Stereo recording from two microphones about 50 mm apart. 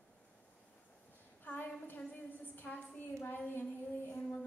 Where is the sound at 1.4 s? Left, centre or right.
Left.